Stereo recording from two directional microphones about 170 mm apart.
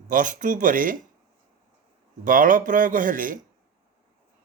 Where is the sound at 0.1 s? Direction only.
50° right (ahead or behind).